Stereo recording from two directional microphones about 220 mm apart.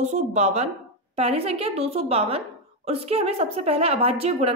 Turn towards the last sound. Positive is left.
turn(degrees=-30)  # may be behind; listen again after turning